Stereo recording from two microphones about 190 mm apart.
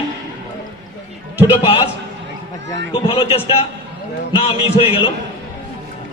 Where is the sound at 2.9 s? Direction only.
30° left (ahead or behind).